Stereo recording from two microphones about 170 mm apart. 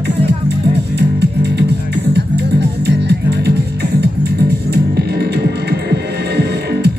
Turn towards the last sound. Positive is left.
turn(degrees=-70)  # may be behind; listen again after turning